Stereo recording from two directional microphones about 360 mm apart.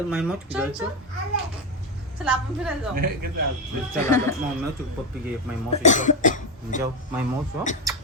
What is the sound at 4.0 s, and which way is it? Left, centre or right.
Speech, centre.